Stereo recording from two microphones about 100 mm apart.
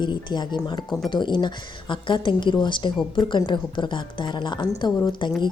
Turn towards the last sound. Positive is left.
turn(degrees=50)  # may be behind; listen again after turning